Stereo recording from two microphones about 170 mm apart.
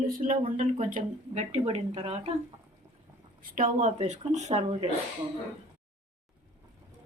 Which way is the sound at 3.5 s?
50° right (ahead or behind).